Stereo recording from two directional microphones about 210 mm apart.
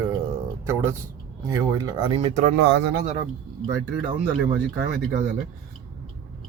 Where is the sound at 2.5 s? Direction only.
55° right (ahead or behind).